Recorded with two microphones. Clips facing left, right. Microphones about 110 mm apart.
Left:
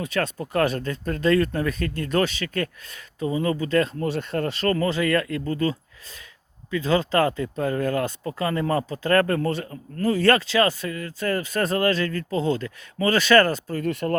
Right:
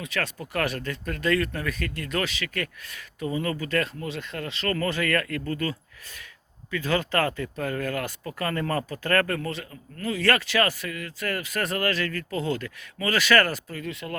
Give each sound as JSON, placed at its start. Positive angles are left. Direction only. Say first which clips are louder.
{"t": 0.0, "sound": "speech", "louder": "left 5 dB", "side_deg": 30}
{"t": 4.0, "sound": "speech", "louder": "left 8 dB", "side_deg": 40}
{"t": 4.7, "sound": "speech", "louder": "left 3 dB", "side_deg": 20}
{"t": 13.8, "sound": "speech", "louder": "left 11 dB", "side_deg": 50}